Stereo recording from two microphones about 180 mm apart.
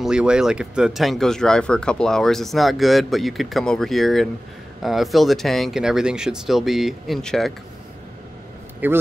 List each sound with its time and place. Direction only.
0.0 s speech: 5° right (ahead or behind)
8.8 s a man's voice: 10° right (ahead or behind)